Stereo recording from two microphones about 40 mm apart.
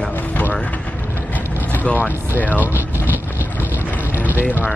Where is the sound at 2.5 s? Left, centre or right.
Right.